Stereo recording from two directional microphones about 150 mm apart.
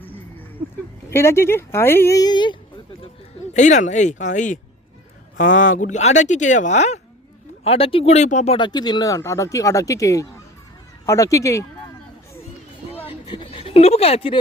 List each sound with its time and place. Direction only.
1.1 s a woman's voice: 15° left (ahead or behind)
3.5 s speech: 55° left (ahead or behind)
8.5 s speech: 30° left (ahead or behind)
13.1 s a sound: 35° left (ahead or behind)